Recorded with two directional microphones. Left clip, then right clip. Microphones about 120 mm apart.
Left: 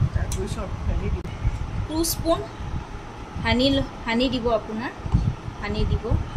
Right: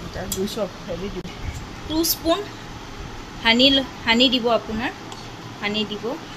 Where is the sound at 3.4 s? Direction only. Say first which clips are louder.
Right 6 dB; 10° right (ahead or behind).